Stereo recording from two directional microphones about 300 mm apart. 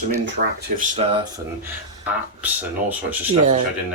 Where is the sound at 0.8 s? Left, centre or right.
Centre.